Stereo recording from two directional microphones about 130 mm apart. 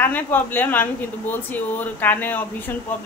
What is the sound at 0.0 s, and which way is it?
Speech, 15° left (ahead or behind).